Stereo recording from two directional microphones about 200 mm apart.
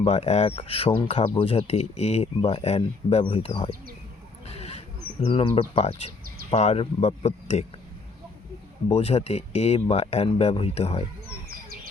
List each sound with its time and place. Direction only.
0.0 s speech: 30° left (ahead or behind)
4.4 s a sound: 30° left (ahead or behind)
5.2 s speech: 25° left (ahead or behind)
8.9 s speech: 30° left (ahead or behind)